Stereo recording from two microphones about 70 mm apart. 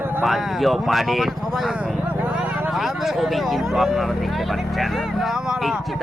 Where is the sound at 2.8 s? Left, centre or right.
Centre.